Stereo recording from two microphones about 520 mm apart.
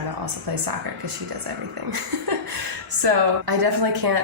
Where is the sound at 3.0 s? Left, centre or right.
Right.